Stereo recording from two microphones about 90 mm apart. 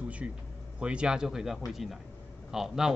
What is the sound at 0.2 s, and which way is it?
Speech, 15° right (ahead or behind).